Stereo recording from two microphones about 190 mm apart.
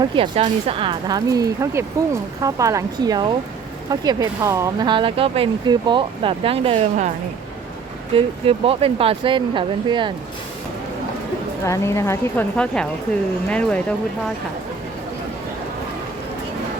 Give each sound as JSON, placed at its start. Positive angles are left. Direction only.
{"t": 0.0, "sound": "speech", "side_deg": -25}
{"t": 8.1, "sound": "speech", "side_deg": -30}
{"t": 11.6, "sound": "speech", "side_deg": 15}